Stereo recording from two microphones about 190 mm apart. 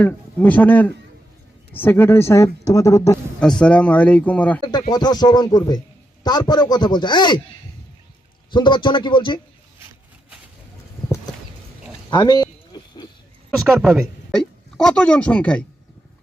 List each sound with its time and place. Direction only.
0.0 s a man's voice: 5° left (ahead or behind)
3.4 s speech: 5° left (ahead or behind)
4.7 s a man's voice: 20° left (ahead or behind)
8.4 s a man's voice: 25° left (ahead or behind)
12.1 s a sound: 20° left (ahead or behind)
13.6 s speech: centre (ahead or behind)